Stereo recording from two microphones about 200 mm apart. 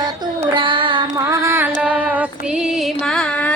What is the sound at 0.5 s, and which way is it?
Carnatic music, 25° right (ahead or behind).